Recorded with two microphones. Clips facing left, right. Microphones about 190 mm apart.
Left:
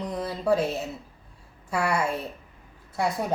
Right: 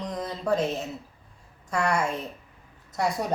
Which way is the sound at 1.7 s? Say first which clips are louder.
Even; 5° left (ahead or behind).